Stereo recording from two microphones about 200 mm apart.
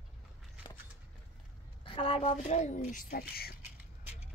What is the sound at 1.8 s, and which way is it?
Speech, 25° left (ahead or behind).